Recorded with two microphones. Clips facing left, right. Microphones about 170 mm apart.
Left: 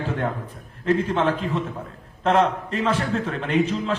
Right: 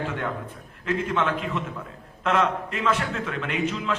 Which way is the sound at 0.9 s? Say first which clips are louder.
Left 4 dB; 30° left (ahead or behind).